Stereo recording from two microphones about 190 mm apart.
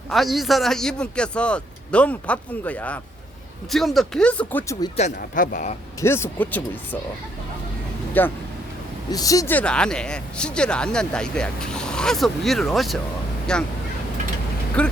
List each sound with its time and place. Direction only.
0.1 s speech: centre (ahead or behind)
4.9 s speech: 40° left (ahead or behind)
6.0 s speech: 15° left (ahead or behind)
8.2 s speech: 10° left (ahead or behind)
14.8 s speech: 5° left (ahead or behind)